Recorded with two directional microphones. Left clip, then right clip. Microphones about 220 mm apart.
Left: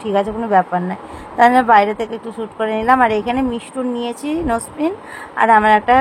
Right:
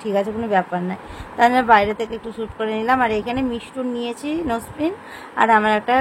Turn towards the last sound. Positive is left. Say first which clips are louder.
# left 4 dB
turn(degrees=15)  # may be behind; listen again after turning